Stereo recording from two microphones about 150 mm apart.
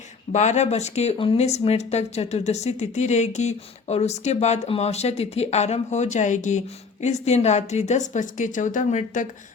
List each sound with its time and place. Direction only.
0.3 s speech: 50° left (ahead or behind)